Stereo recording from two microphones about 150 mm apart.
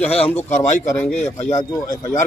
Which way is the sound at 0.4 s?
55° left (ahead or behind).